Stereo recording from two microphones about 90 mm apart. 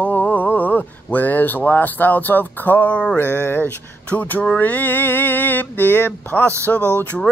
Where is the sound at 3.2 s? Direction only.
25° left (ahead or behind).